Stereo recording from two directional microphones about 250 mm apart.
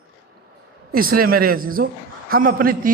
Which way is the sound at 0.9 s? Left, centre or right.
Right.